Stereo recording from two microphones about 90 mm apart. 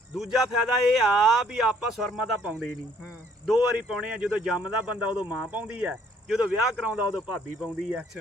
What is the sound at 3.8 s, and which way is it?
Speech, 10° right (ahead or behind).